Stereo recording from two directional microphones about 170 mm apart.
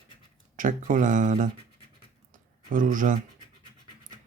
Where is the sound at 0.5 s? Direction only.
50° right (ahead or behind).